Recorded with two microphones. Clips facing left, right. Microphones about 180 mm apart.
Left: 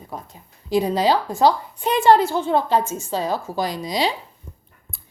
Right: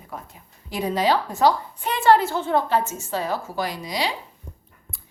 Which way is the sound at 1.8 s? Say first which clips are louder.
Left 3 dB; 15° left (ahead or behind).